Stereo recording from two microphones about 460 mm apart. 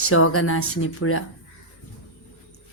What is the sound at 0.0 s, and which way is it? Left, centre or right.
Speech, left.